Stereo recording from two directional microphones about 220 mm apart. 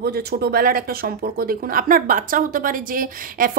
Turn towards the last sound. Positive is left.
turn(degrees=-40)  # may be behind; listen again after turning